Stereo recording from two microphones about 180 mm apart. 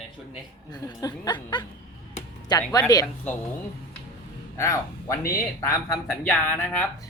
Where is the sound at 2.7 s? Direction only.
20° left (ahead or behind).